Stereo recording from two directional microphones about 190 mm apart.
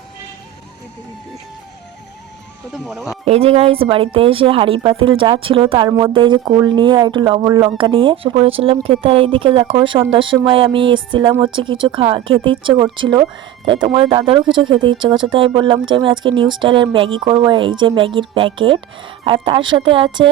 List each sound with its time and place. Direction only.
2.7 s speech: centre (ahead or behind)
3.2 s speech: 30° right (ahead or behind)